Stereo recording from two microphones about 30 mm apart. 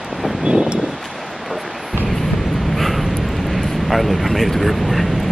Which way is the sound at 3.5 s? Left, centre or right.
Centre.